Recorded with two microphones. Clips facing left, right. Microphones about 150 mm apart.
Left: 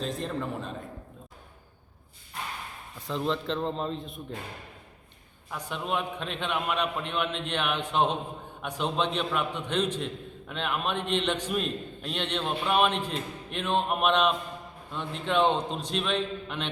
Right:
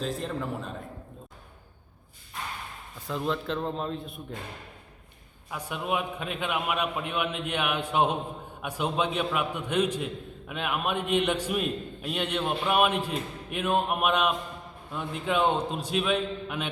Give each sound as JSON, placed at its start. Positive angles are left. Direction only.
{"t": 0.0, "sound": "a man's voice", "side_deg": 0}
{"t": 3.1, "sound": "a man's voice", "side_deg": -5}
{"t": 5.5, "sound": "a man's voice", "side_deg": -10}